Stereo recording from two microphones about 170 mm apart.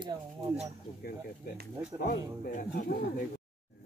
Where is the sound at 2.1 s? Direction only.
65° left (ahead or behind).